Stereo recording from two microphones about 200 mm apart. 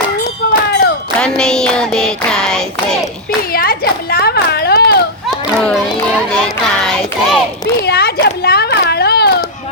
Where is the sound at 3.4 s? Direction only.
45° left (ahead or behind).